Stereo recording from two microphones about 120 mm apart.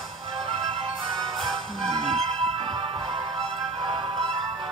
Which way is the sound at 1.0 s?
Centre (ahead or behind).